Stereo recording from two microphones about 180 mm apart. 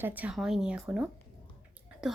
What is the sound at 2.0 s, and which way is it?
Speech, 5° right (ahead or behind).